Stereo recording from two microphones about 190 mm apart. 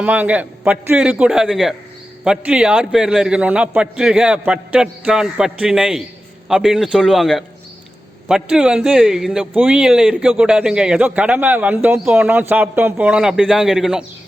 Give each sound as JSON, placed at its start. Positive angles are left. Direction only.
{"t": 0.0, "sound": "a man's voice", "side_deg": -5}